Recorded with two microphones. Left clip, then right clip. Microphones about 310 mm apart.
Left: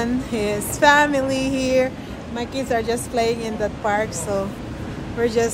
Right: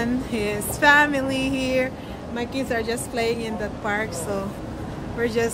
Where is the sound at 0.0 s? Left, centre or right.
Centre.